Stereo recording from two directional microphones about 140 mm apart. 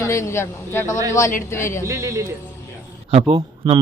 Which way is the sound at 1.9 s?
20° right (ahead or behind).